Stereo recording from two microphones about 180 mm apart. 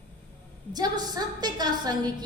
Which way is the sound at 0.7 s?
20° right (ahead or behind).